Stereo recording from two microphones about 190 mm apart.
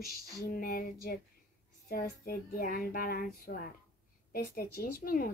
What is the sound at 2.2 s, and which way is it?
Speech, 50° left (ahead or behind).